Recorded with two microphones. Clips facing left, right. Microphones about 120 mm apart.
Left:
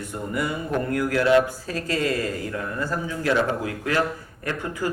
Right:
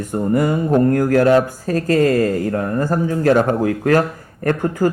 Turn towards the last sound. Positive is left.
turn(degrees=-45)  # may be behind; listen again after turning